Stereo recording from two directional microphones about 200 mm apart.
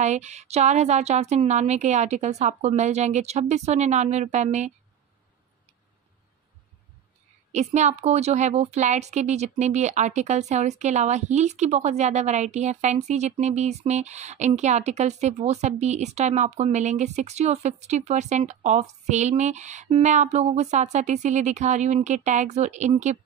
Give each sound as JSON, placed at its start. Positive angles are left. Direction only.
{"t": 0.0, "sound": "a woman's voice", "side_deg": -35}
{"t": 7.5, "sound": "a woman's voice", "side_deg": -35}